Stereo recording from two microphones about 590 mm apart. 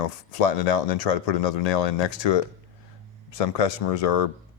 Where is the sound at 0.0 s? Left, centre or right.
Left.